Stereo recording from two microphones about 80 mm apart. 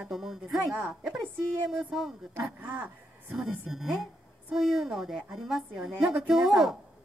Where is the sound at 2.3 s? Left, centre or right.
Right.